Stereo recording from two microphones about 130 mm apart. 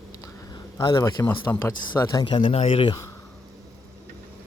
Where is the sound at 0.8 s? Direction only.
30° left (ahead or behind).